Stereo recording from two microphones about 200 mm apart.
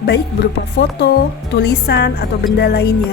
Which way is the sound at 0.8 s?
55° left (ahead or behind).